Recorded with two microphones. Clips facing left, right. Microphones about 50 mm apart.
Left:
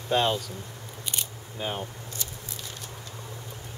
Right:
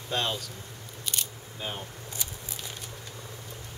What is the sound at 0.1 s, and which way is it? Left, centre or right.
Speech, centre.